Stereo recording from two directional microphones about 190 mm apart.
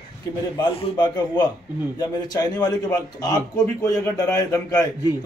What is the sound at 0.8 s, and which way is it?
A man's voice, 20° left (ahead or behind).